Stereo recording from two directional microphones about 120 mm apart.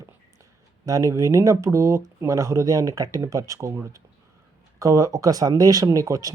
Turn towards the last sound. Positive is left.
turn(degrees=-30)  # may be behind; listen again after turning